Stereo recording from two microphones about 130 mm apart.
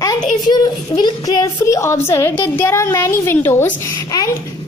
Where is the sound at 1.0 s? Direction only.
30° left (ahead or behind).